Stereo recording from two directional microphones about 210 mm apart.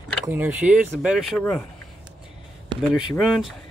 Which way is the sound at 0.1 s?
5° right (ahead or behind).